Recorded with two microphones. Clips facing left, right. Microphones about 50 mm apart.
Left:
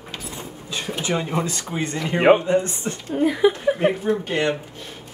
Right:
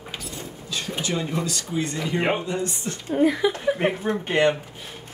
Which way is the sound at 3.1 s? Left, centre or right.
Centre.